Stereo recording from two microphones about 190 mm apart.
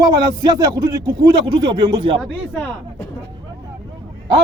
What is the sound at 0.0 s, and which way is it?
A man's voice, 20° right (ahead or behind).